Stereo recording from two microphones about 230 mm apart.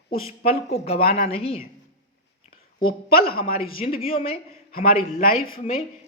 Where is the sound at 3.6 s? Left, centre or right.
Left.